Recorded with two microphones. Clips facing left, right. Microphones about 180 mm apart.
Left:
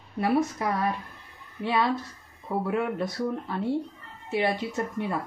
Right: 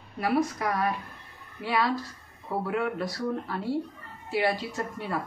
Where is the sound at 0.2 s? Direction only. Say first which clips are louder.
Left 1 dB; 25° left (ahead or behind).